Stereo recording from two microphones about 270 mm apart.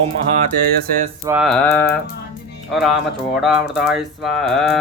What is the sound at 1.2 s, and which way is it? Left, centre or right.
Music, centre.